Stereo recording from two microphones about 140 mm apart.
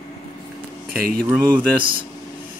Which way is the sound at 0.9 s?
90° right.